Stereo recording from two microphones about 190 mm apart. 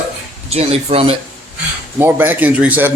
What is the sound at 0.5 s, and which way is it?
Speech, 35° right (ahead or behind).